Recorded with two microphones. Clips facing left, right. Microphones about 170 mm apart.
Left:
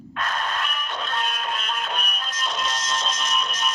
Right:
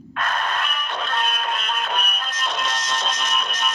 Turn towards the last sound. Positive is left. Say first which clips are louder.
# right 1 dB
turn(degrees=-60)  # may be behind; listen again after turning